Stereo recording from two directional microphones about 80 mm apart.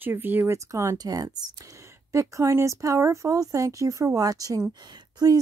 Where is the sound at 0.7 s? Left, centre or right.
Right.